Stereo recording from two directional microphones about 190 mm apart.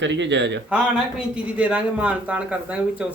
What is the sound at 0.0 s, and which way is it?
Speech, 70° right (ahead or behind).